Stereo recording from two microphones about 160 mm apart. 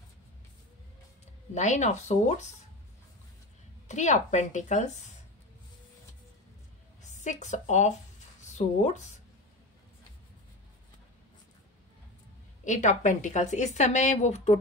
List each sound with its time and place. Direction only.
1.5 s speech: 45° left (ahead or behind)
3.8 s speech: 45° left (ahead or behind)
7.0 s a woman's voice: 50° left (ahead or behind)
12.6 s speech: 50° left (ahead or behind)